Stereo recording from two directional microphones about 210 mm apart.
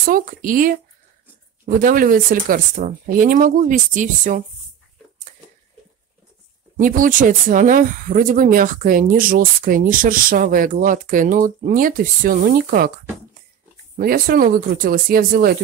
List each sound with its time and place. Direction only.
0.0 s speech: 40° right (ahead or behind)
6.8 s speech: 40° right (ahead or behind)
13.9 s speech: 45° right (ahead or behind)